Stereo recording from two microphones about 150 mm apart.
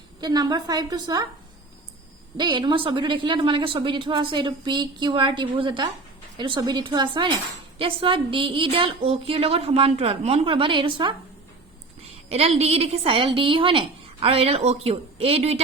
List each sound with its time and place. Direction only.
0.2 s a woman's voice: 25° right (ahead or behind)
2.4 s a woman's voice: 30° right (ahead or behind)
12.3 s a woman's voice: 45° right (ahead or behind)